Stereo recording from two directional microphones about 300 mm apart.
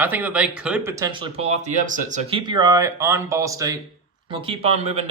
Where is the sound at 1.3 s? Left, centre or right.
Right.